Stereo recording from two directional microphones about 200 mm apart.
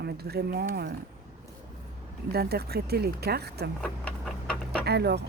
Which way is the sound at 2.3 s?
50° right (ahead or behind).